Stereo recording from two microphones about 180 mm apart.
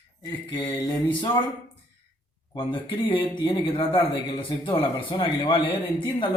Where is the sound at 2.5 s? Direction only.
30° left (ahead or behind).